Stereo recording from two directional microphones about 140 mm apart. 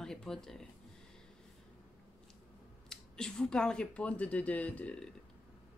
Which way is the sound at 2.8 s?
5° left (ahead or behind).